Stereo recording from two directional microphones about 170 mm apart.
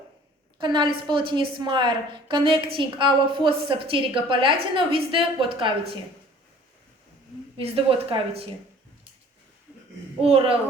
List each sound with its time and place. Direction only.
0.6 s a woman's voice: 30° right (ahead or behind)
7.6 s a woman's voice: 35° right (ahead or behind)
10.2 s a woman's voice: 35° right (ahead or behind)